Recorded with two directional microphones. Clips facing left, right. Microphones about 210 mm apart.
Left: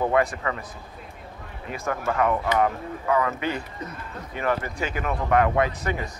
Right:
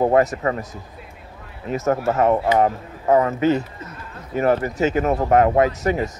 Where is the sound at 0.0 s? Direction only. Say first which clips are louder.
Right 6 dB; 40° right (ahead or behind).